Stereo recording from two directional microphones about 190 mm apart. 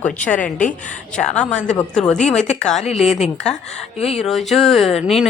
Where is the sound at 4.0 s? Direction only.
35° left (ahead or behind).